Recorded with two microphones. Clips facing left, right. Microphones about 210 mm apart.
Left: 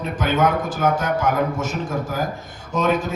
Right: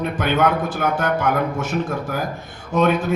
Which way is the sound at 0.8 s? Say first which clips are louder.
Even; 60° right (ahead or behind).